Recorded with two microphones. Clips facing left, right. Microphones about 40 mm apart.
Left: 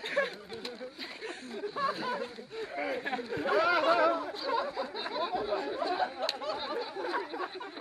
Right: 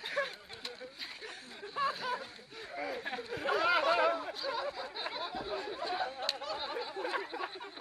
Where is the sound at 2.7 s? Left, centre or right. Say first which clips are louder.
Left 4 dB; left.